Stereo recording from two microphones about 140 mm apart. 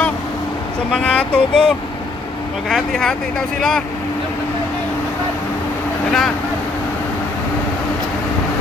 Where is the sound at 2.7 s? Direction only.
5° left (ahead or behind).